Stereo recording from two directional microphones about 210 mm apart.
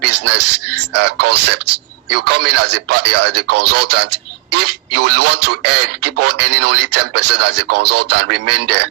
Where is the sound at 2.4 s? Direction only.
90° right.